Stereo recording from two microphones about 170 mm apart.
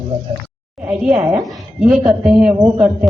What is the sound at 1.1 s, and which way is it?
A woman's voice, 5° right (ahead or behind).